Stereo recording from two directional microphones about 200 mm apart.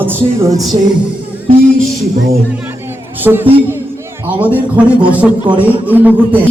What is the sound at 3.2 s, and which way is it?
A man's voice, 10° right (ahead or behind).